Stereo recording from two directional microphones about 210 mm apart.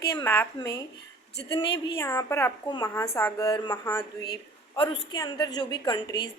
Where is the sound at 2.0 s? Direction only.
15° left (ahead or behind).